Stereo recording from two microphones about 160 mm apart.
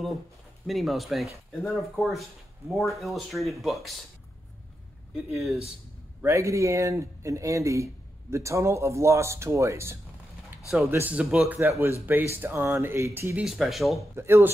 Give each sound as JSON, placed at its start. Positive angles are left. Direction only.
{"t": 0.7, "sound": "speech", "side_deg": 0}
{"t": 5.3, "sound": "speech", "side_deg": 0}
{"t": 6.2, "sound": "speech", "side_deg": -20}
{"t": 13.4, "sound": "speech", "side_deg": -5}
{"t": 14.1, "sound": "speech", "side_deg": -15}